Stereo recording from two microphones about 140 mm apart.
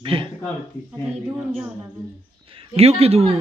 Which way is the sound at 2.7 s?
45° right (ahead or behind).